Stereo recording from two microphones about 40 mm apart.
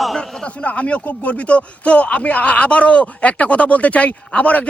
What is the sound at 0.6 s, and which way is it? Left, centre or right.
A man's voice, left.